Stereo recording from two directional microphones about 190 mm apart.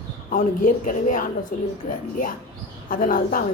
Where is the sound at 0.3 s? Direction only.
45° left (ahead or behind).